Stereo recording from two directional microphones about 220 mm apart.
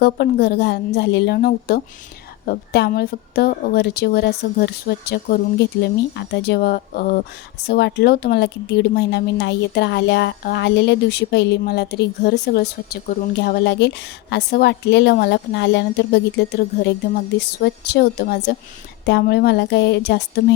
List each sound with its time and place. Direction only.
0.0 s speech: 50° left (ahead or behind)
17.6 s speech: 50° left (ahead or behind)